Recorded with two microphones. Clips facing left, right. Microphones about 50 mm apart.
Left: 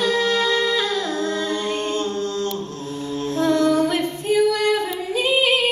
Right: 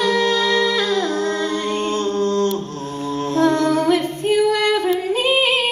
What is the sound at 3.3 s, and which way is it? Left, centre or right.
Singing, right.